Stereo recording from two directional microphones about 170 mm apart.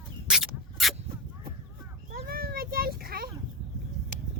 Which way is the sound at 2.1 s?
60° right (ahead or behind).